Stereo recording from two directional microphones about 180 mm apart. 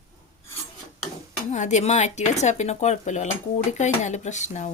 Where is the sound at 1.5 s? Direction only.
40° left (ahead or behind).